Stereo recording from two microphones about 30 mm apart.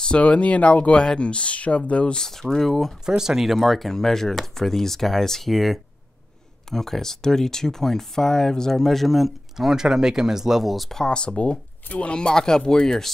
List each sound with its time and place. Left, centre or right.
0.2 s speech: left
0.9 s speech: left
2.1 s speech: centre
3.2 s speech: centre
3.4 s speech: centre
3.9 s speech: centre
6.7 s speech: centre
8.8 s speech: centre
9.6 s speech: centre
10.6 s speech: centre
11.1 s speech: left
12.4 s speech: left